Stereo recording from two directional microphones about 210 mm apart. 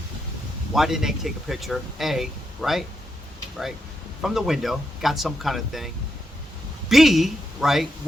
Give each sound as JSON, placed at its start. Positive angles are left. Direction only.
{"t": 0.7, "sound": "speech", "side_deg": 0}
{"t": 4.2, "sound": "speech", "side_deg": 0}